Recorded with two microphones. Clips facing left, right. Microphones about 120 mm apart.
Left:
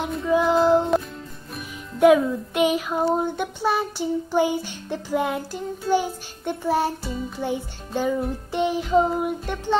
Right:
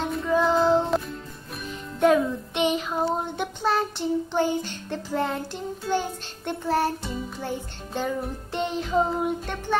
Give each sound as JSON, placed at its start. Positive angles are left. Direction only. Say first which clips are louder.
{"t": 0.3, "sound": "music", "louder": "left 3 dB", "side_deg": 15}
{"t": 2.0, "sound": "music", "louder": "left 4 dB", "side_deg": 5}